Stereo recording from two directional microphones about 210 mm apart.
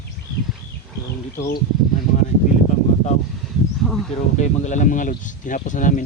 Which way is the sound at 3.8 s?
Centre (ahead or behind).